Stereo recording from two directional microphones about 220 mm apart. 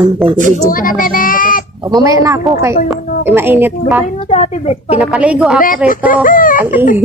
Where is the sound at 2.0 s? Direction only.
15° right (ahead or behind).